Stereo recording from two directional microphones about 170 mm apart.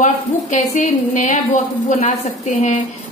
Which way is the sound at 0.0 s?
45° left (ahead or behind).